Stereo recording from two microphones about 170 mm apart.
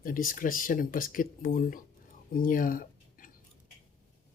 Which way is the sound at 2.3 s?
55° left (ahead or behind).